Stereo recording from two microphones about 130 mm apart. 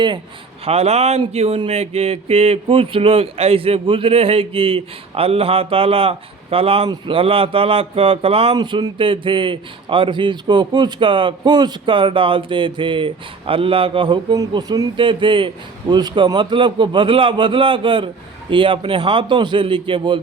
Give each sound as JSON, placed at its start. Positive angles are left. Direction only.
{"t": 0.6, "sound": "speech", "side_deg": -50}
{"t": 8.5, "sound": "a man's voice", "side_deg": -35}